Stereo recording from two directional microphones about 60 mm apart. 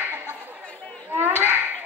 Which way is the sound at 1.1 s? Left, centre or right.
Right.